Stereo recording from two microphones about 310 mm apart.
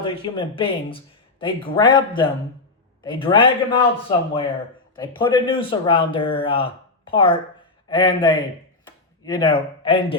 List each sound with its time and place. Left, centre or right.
0.0 s speech: centre
5.1 s speech: centre